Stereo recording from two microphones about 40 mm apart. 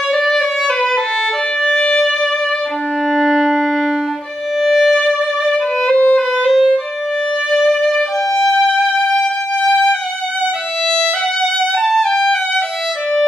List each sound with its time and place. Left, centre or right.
0.2 s music: centre
1.8 s music: left
3.1 s music: centre
4.6 s music: centre
5.9 s music: left
7.5 s violin: centre
8.5 s music: centre
11.9 s music: centre